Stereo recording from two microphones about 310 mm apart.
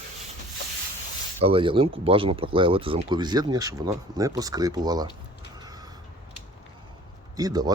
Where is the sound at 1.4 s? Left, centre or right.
Centre.